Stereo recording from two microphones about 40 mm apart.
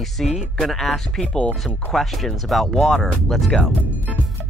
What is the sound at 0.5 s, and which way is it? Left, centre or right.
Speech, centre.